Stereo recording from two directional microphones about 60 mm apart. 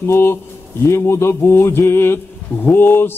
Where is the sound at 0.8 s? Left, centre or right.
Left.